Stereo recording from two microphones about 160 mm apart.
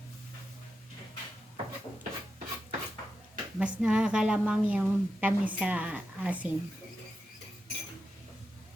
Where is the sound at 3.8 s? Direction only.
5° right (ahead or behind).